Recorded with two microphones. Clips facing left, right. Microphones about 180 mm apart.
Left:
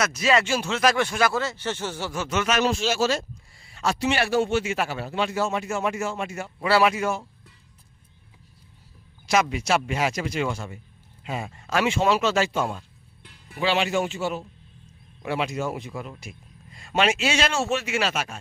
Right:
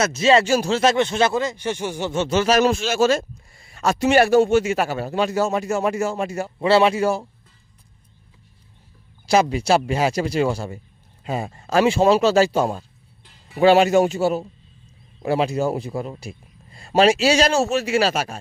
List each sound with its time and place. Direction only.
0.0 s speech: 25° right (ahead or behind)
2.6 s speech: 50° right (ahead or behind); by 7.2 s 35° right (ahead or behind)
9.2 s speech: 30° right (ahead or behind)
13.2 s music: 65° left (ahead or behind)
13.6 s a man's voice: 45° right (ahead or behind)